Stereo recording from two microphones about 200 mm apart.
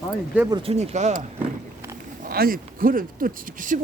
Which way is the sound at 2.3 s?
45° right (ahead or behind).